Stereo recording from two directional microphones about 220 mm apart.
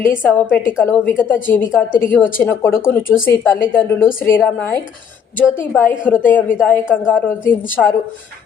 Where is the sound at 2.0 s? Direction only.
10° left (ahead or behind).